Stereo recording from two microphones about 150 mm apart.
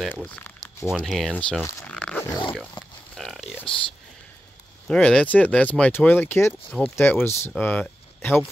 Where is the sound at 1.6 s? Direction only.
20° left (ahead or behind).